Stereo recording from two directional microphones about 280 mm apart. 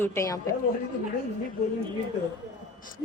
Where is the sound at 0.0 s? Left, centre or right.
Centre.